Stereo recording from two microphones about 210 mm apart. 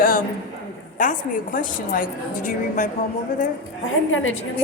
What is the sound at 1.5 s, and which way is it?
Speech, 40° left (ahead or behind).